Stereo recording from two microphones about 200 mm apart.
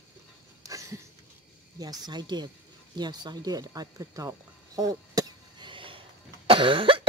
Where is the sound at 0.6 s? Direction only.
15° right (ahead or behind).